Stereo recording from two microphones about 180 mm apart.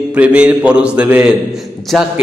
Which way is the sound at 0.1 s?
5° right (ahead or behind).